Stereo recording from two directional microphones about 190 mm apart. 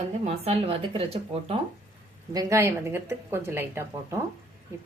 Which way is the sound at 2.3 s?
20° right (ahead or behind).